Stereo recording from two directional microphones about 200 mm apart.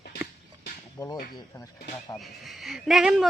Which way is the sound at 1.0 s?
15° left (ahead or behind).